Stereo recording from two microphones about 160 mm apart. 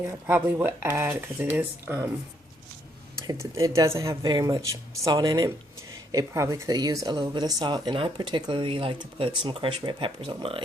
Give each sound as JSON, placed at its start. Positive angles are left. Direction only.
{"t": 0.1, "sound": "speech", "side_deg": -15}
{"t": 3.2, "sound": "speech", "side_deg": -20}